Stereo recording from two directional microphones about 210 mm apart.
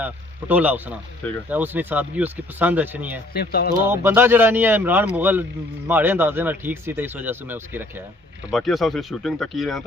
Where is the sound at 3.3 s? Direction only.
50° left (ahead or behind).